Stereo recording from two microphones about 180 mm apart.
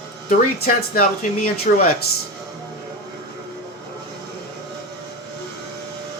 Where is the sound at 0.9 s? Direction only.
45° left (ahead or behind).